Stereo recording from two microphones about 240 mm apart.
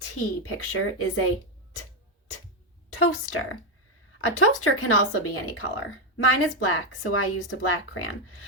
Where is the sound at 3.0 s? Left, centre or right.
Left.